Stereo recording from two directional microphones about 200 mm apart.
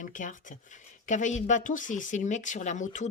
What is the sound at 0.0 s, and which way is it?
Speech, 40° left (ahead or behind).